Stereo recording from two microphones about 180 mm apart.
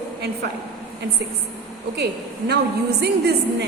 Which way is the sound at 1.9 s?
65° right (ahead or behind).